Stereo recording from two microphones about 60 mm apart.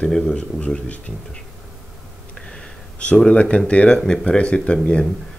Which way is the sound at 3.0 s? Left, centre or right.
Centre.